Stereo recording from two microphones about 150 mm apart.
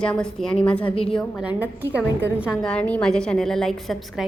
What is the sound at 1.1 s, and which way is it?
Speech, 5° left (ahead or behind).